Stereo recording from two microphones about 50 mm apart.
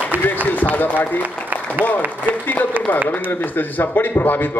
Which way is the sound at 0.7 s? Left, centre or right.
Left.